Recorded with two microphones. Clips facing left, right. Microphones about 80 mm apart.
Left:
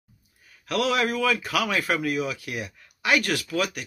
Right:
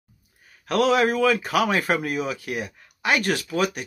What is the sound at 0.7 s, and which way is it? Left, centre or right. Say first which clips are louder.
A man's voice: right 5 dB; right.